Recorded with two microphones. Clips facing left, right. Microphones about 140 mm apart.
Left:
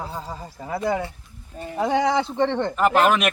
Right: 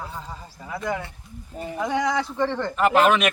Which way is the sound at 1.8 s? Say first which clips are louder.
Left 4 dB; 30° left (ahead or behind).